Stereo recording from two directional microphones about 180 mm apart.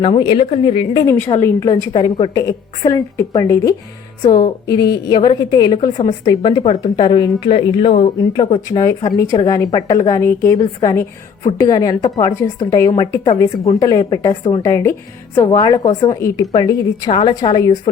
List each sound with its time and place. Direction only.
0.0 s a woman's voice: 30° left (ahead or behind)
1.0 s a woman's voice: 15° left (ahead or behind)